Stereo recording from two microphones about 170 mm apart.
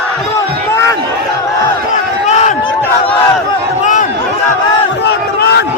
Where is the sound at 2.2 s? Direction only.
40° left (ahead or behind).